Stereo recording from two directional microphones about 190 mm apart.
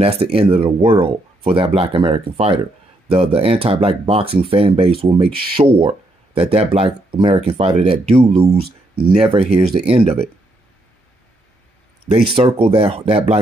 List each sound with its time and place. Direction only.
0.0 s speech: 30° right (ahead or behind)
12.4 s speech: 30° right (ahead or behind)